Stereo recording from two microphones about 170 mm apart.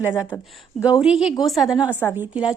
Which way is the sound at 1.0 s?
5° right (ahead or behind).